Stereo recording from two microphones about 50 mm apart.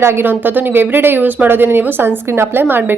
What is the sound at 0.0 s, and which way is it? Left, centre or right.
A woman's voice, right.